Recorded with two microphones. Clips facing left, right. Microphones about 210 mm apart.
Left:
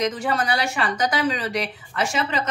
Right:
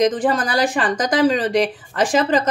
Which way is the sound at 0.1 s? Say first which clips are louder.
Right 5 dB; 35° right (ahead or behind).